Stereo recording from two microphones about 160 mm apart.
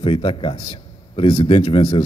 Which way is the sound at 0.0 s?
30° left (ahead or behind).